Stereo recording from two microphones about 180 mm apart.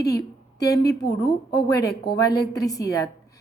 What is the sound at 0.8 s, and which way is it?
Speech, 65° left (ahead or behind).